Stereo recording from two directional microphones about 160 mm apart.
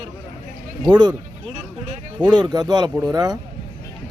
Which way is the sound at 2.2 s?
25° right (ahead or behind).